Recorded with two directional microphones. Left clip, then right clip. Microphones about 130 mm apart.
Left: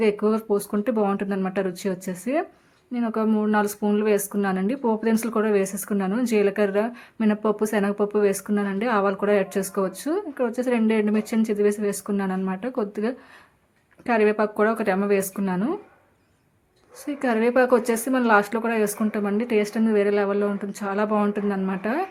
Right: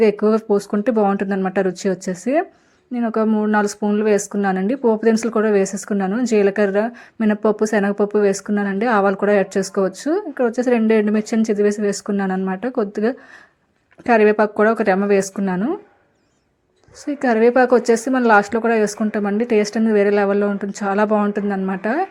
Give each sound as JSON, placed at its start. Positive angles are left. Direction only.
{"t": 0.0, "sound": "speech", "side_deg": -40}
{"t": 17.1, "sound": "speech", "side_deg": -35}
{"t": 21.2, "sound": "speech", "side_deg": -30}